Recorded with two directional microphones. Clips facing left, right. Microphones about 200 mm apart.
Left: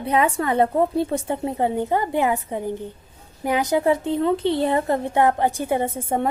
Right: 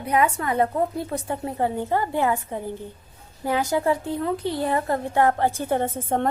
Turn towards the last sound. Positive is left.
turn(degrees=10)  # may be behind; listen again after turning